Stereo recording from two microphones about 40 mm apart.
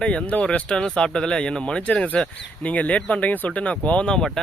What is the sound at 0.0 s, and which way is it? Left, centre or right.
Speech, left.